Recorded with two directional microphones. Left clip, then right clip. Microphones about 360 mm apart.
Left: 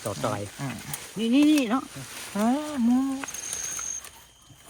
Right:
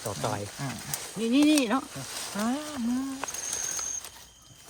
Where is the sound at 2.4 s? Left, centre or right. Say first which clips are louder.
Left 6 dB; centre.